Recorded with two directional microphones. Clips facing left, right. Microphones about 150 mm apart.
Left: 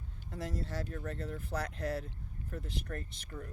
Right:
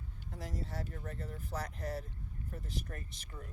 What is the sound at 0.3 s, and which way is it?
Speech, 75° left (ahead or behind).